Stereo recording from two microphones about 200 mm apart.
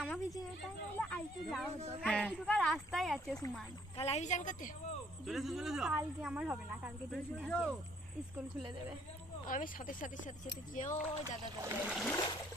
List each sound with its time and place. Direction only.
0.0 s a sound: 5° right (ahead or behind)
0.6 s a sound: 5° left (ahead or behind)
1.5 s speech: centre (ahead or behind)
3.9 s speech: 30° left (ahead or behind)
5.2 s speech: centre (ahead or behind)
9.5 s speech: 40° left (ahead or behind)
11.7 s speech: 10° right (ahead or behind)
12.1 s trickle: 20° left (ahead or behind)